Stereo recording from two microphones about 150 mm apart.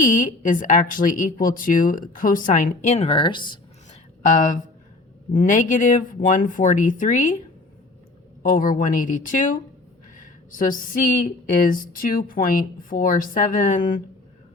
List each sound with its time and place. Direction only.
0.0 s a woman's voice: 60° left (ahead or behind); by 3.6 s 30° left (ahead or behind)
4.3 s a woman's voice: 55° left (ahead or behind)
8.4 s a woman's voice: 70° left (ahead or behind)
10.2 s a sound: 60° left (ahead or behind)
11.6 s a woman's voice: 65° left (ahead or behind)